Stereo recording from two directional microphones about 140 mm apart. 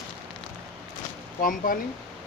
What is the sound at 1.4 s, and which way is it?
Speech, 80° left.